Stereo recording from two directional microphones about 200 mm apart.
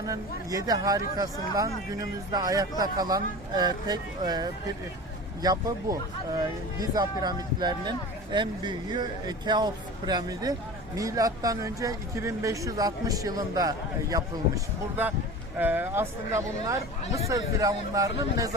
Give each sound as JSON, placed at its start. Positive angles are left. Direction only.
{"t": 0.0, "sound": "speech", "side_deg": -20}
{"t": 5.4, "sound": "speech", "side_deg": -20}